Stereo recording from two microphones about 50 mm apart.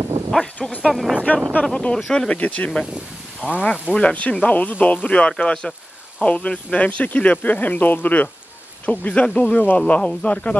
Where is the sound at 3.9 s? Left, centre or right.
Left.